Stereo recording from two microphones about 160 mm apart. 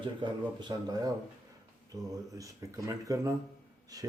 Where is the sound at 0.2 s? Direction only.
30° right (ahead or behind).